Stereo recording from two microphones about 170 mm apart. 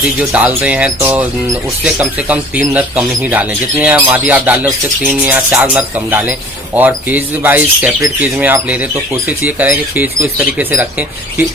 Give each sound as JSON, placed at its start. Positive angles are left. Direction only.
{"t": 0.0, "sound": "speech", "side_deg": -10}